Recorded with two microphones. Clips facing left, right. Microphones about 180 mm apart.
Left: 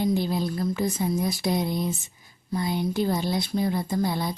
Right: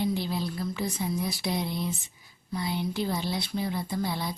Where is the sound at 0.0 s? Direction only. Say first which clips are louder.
Left 4 dB; 45° left (ahead or behind).